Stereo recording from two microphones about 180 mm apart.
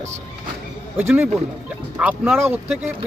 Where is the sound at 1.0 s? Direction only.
10° right (ahead or behind).